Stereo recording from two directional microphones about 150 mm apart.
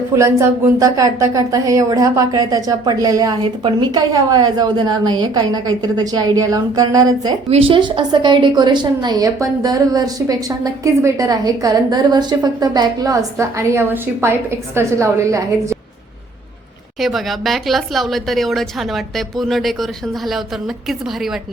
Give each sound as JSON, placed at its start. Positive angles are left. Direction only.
{"t": 0.1, "sound": "speech", "side_deg": -20}
{"t": 7.5, "sound": "speech", "side_deg": -35}
{"t": 17.0, "sound": "speech", "side_deg": 0}